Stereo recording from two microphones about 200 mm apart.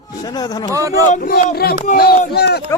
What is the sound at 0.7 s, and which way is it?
Speech, 15° right (ahead or behind).